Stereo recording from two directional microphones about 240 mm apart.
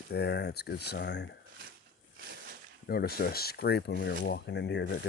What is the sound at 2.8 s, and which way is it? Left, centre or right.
Speech, left.